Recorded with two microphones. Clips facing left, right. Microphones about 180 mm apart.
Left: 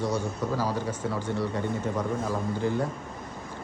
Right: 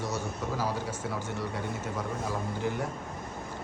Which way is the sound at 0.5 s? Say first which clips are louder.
Left 2 dB; 10° right (ahead or behind).